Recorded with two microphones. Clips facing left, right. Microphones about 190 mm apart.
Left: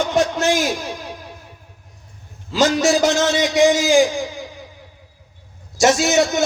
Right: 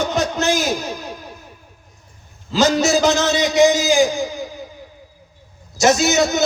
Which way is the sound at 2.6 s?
45° right (ahead or behind).